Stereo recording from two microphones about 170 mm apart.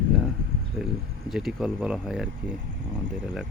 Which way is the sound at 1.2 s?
Centre (ahead or behind).